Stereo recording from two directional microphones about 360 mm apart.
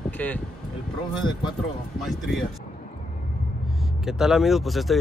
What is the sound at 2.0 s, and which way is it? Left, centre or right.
Speech, centre.